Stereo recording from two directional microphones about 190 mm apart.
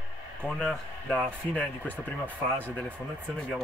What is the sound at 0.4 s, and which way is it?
Speech, 5° left (ahead or behind).